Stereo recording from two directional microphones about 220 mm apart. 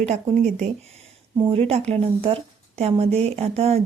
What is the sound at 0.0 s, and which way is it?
Speech, 30° right (ahead or behind).